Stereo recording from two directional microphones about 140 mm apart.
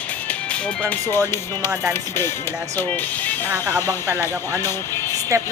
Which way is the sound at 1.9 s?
20° left (ahead or behind).